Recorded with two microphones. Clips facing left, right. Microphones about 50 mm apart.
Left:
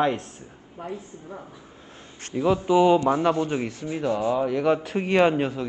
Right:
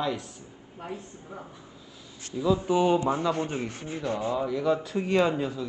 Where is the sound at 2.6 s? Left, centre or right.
Left.